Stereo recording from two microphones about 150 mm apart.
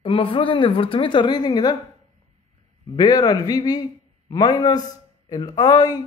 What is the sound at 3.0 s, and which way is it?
A man's voice, 25° left (ahead or behind).